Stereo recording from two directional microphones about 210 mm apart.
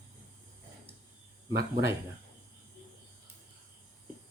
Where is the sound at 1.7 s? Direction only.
15° right (ahead or behind).